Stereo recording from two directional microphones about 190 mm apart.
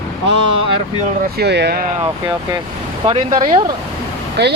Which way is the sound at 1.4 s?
60° right (ahead or behind).